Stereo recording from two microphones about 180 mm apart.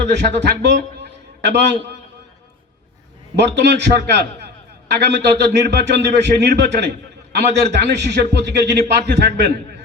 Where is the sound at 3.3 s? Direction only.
70° right (ahead or behind).